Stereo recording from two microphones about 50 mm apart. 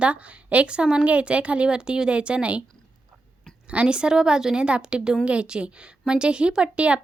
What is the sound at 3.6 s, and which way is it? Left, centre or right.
A woman's voice, right.